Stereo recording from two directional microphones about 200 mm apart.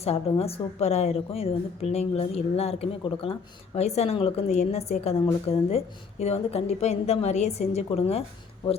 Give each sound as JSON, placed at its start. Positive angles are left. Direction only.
{"t": 0.0, "sound": "a woman's voice", "side_deg": 30}